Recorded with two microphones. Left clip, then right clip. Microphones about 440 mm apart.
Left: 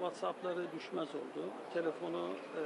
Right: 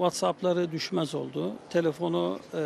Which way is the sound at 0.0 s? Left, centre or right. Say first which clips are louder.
Right 12 dB; right.